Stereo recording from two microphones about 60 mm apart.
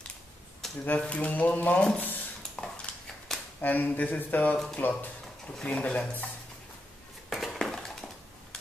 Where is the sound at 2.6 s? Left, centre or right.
Centre.